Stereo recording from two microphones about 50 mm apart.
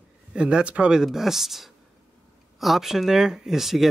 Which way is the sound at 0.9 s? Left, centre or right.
Centre.